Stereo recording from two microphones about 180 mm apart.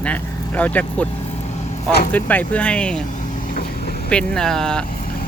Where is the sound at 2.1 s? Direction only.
10° left (ahead or behind).